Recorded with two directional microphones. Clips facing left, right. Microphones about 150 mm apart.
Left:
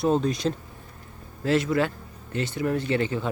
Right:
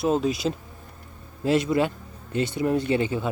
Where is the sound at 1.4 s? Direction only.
15° right (ahead or behind).